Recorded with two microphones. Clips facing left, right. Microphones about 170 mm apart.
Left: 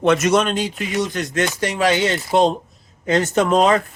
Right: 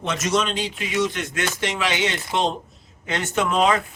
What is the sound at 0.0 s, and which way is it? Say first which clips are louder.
Speech: left 7 dB; 60° left (ahead or behind).